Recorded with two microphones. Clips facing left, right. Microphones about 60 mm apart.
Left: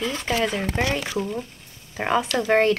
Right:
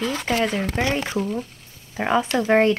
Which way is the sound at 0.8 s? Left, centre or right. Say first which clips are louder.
Right 2 dB; right.